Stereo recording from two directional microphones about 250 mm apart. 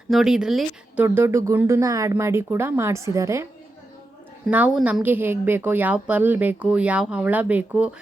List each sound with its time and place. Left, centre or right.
0.1 s speech: centre
4.4 s a woman's voice: centre